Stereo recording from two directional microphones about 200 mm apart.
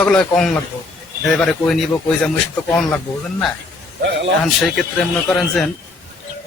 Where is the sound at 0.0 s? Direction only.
5° left (ahead or behind).